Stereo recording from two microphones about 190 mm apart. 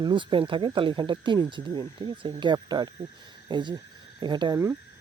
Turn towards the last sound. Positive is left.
turn(degrees=-25)  # may be behind; listen again after turning